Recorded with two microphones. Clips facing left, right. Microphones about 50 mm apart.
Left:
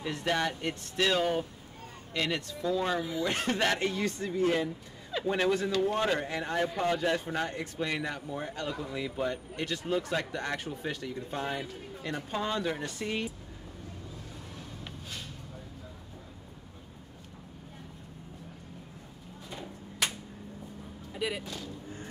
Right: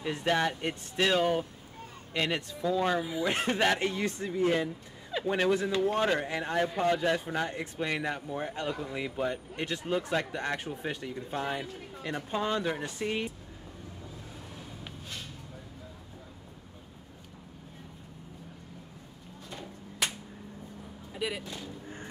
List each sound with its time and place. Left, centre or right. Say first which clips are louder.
0.0 s a man's voice: right 2 dB; centre
19.5 s a sound: left 1 dB; centre
21.1 s vehicle: left 1 dB; centre
21.8 s thump: even; right